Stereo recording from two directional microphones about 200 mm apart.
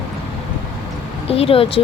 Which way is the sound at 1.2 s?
30° left (ahead or behind).